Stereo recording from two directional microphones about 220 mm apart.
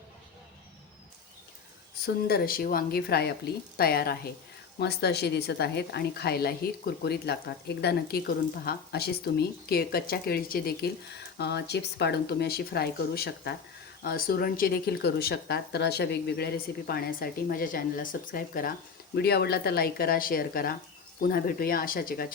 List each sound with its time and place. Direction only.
2.2 s a woman's voice: 45° left (ahead or behind)